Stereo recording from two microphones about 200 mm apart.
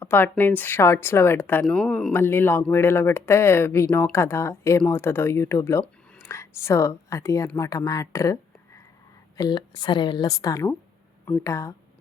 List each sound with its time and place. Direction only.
0.0 s speech: 10° left (ahead or behind)
9.4 s speech: 20° left (ahead or behind)